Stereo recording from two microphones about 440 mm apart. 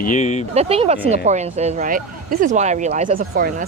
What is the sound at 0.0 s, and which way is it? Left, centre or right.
Speech, centre.